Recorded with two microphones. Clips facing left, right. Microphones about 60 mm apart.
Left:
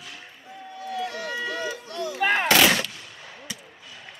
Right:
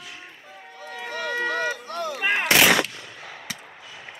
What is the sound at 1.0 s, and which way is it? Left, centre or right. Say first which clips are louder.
Run: right 5 dB; right.